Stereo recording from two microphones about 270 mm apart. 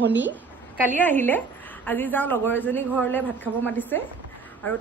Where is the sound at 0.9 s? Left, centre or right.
Centre.